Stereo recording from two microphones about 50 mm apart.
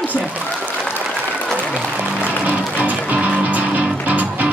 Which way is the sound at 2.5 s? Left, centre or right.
Right.